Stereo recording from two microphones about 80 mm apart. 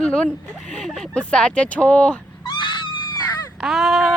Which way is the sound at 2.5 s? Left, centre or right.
Left.